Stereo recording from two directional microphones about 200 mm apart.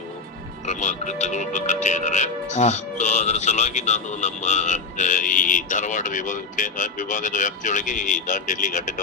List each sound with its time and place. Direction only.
0.6 s speech: 35° left (ahead or behind)